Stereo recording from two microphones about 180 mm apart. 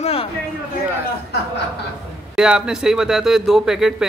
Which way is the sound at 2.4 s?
5° right (ahead or behind).